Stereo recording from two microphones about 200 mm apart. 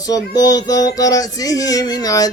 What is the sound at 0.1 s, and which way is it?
Music, 20° left (ahead or behind).